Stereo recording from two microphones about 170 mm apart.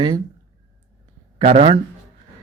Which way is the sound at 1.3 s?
35° right (ahead or behind).